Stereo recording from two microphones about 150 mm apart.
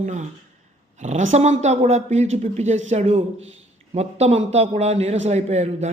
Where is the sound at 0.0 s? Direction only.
55° right (ahead or behind).